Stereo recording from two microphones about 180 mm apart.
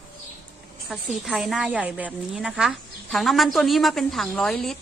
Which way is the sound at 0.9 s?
Centre (ahead or behind).